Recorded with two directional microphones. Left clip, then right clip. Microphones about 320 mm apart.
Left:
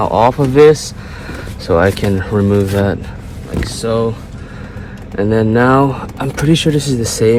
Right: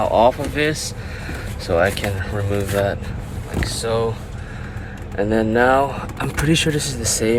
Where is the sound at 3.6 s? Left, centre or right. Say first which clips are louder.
Left 5 dB; centre.